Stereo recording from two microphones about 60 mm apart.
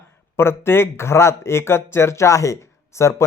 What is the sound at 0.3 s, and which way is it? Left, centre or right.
Speech, left.